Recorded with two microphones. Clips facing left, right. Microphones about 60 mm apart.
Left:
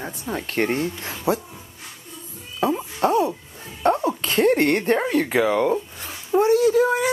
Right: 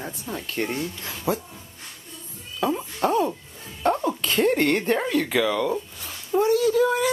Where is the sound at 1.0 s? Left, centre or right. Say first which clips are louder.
Left 3 dB; left.